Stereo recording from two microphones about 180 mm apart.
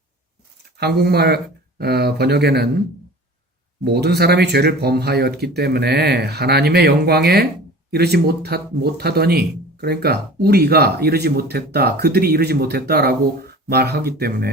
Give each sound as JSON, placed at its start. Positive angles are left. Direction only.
{"t": 0.8, "sound": "speech", "side_deg": -60}
{"t": 3.8, "sound": "speech", "side_deg": -65}